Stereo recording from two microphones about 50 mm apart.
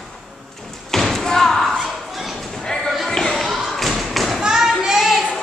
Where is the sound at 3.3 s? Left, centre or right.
Centre.